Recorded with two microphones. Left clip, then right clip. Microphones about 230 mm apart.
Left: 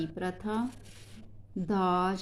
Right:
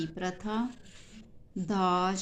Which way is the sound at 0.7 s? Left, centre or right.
Left.